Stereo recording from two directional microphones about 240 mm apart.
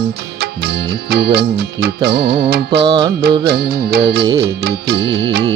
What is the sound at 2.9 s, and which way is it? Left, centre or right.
Music, right.